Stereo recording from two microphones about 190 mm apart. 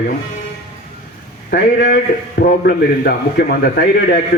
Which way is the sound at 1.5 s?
60° left (ahead or behind).